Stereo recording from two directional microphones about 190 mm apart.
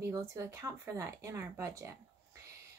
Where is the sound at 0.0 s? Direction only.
15° right (ahead or behind).